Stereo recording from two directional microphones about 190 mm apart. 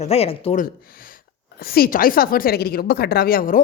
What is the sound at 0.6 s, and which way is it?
Speech, 50° left (ahead or behind).